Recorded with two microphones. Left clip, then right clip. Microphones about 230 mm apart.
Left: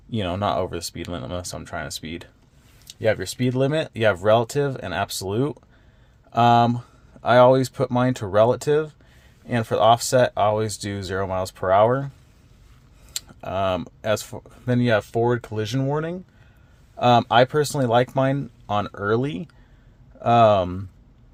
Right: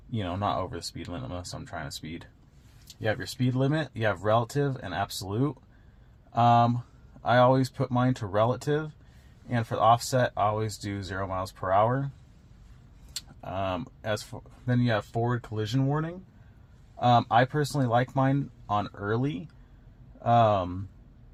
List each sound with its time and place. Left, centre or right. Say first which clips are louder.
0.1 s speech: left 6 dB; left
13.1 s speech: left 8 dB; left